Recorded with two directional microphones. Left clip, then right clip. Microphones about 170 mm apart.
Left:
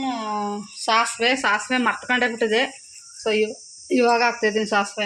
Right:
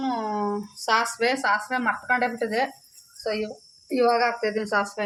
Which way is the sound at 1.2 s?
45° left (ahead or behind).